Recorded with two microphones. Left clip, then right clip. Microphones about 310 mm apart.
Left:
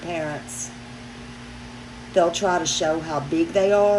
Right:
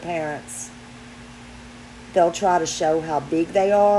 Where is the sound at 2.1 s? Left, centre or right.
Centre.